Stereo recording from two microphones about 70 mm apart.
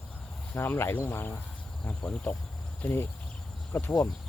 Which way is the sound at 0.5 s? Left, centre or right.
Left.